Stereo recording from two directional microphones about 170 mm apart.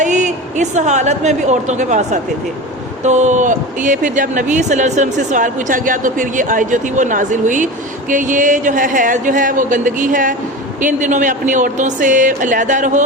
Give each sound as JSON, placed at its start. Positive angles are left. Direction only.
{"t": 0.0, "sound": "speech", "side_deg": -45}